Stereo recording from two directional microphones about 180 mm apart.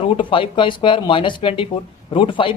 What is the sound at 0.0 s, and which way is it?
Speech, 30° left (ahead or behind).